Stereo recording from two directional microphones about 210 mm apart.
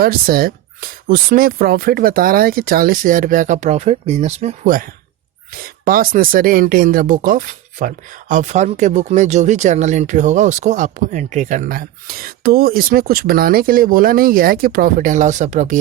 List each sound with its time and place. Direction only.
0.0 s speech: 45° right (ahead or behind)